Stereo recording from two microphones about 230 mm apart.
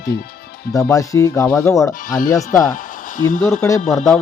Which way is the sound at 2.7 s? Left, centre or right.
Left.